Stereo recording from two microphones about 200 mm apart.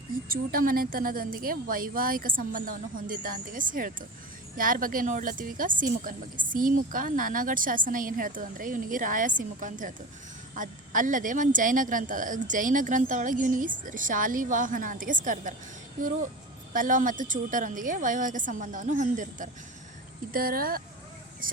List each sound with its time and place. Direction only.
0.3 s a woman's voice: 45° right (ahead or behind)
16.7 s a woman's voice: 40° right (ahead or behind)